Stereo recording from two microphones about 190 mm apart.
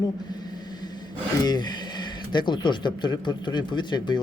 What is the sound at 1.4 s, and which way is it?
Speech, 20° left (ahead or behind).